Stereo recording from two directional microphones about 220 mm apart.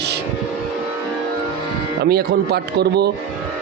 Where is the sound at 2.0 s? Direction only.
45° right (ahead or behind).